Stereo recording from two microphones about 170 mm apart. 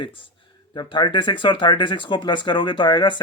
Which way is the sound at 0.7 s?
25° left (ahead or behind).